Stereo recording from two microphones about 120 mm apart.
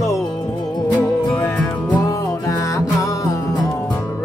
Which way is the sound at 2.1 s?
25° left (ahead or behind).